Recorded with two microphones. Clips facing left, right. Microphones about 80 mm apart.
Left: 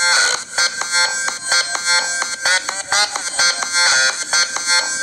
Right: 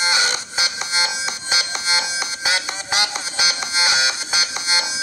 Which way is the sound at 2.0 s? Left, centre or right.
Left.